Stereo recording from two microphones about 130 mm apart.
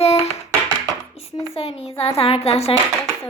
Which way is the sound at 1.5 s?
45° left (ahead or behind).